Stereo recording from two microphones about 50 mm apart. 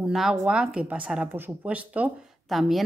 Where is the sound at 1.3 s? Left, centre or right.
Right.